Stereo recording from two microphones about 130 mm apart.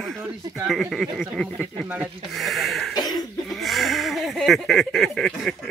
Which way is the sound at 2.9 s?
30° left (ahead or behind).